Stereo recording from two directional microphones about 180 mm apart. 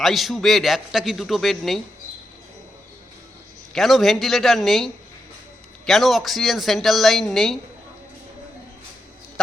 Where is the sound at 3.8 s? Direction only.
Centre (ahead or behind).